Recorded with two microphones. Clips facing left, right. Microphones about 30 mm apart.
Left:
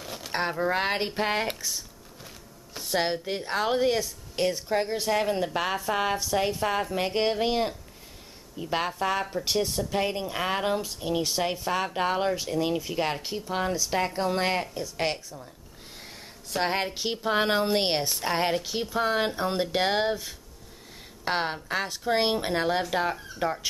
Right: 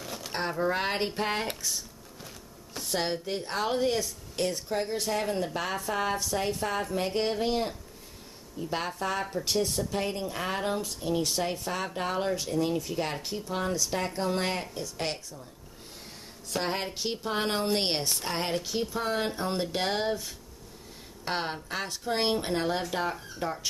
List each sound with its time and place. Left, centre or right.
0.0 s a sound: centre
0.3 s a woman's voice: centre
8.9 s a woman's voice: centre
16.5 s a woman's voice: centre